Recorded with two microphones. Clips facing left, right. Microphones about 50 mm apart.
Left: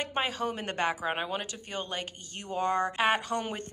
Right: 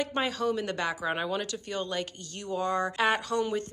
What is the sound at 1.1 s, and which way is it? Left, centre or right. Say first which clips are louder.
Speech: right 2 dB; centre.